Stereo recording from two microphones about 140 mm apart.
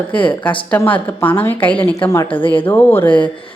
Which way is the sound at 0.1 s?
10° left (ahead or behind).